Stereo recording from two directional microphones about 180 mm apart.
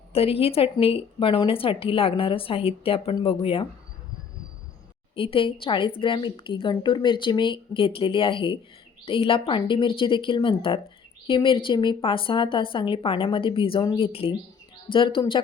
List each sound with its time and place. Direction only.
0.1 s speech: 30° left (ahead or behind)
5.1 s speech: 30° left (ahead or behind)